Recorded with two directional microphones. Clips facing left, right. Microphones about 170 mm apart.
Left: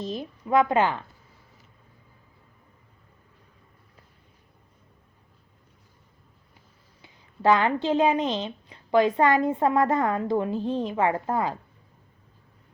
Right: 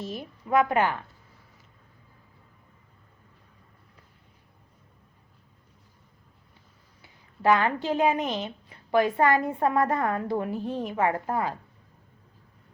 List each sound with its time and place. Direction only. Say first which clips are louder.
0.0 s a woman's voice: left 3 dB; 20° left (ahead or behind)
7.0 s a woman's voice: left 2 dB; 25° left (ahead or behind)